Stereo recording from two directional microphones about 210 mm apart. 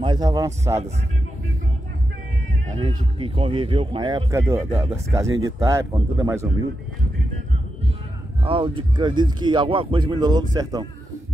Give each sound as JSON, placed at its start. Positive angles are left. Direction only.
{"t": 0.0, "sound": "speech", "side_deg": -20}
{"t": 2.8, "sound": "speech", "side_deg": -25}
{"t": 8.5, "sound": "speech", "side_deg": -25}